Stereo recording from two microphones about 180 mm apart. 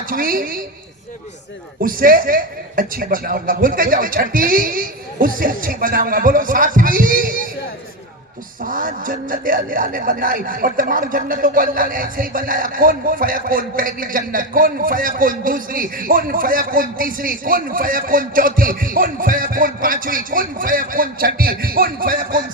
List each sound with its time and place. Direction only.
0.1 s a man's voice: 50° right (ahead or behind)
1.8 s a man's voice: 50° right (ahead or behind)
8.6 s a man's voice: 50° right (ahead or behind)